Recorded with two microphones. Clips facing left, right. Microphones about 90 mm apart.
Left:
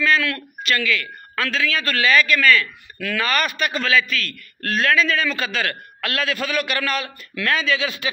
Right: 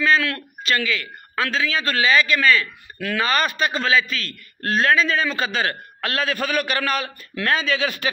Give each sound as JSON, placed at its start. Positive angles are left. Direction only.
{"t": 0.0, "sound": "a man's voice", "side_deg": -30}